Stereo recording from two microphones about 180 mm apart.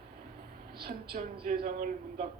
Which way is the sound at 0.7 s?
60° right (ahead or behind).